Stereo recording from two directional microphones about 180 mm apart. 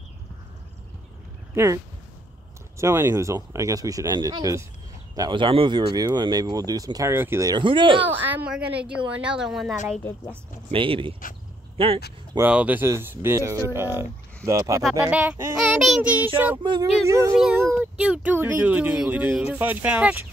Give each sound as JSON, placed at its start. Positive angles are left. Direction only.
{"t": 1.5, "sound": "speech", "side_deg": -15}
{"t": 2.8, "sound": "speech", "side_deg": -15}
{"t": 8.3, "sound": "a woman's voice", "side_deg": -10}
{"t": 10.7, "sound": "speech", "side_deg": -30}
{"t": 12.4, "sound": "speech", "side_deg": -5}
{"t": 14.8, "sound": "a woman's voice", "side_deg": -5}
{"t": 17.0, "sound": "speech", "side_deg": -15}